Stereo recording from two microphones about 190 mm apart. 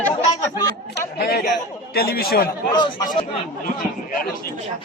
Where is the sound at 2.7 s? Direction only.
25° left (ahead or behind).